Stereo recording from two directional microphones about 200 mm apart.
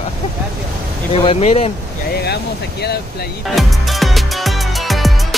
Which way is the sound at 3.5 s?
Centre (ahead or behind).